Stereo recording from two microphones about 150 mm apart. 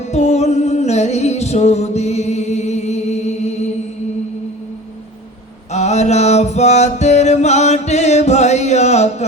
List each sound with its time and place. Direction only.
0.1 s music: 50° left (ahead or behind)
5.7 s music: 50° left (ahead or behind)